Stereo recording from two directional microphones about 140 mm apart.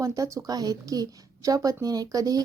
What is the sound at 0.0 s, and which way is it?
Speech, 20° right (ahead or behind).